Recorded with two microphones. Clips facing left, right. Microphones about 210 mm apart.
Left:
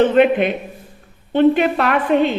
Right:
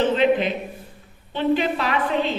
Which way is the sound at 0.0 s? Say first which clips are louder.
Left 5 dB; 60° left (ahead or behind).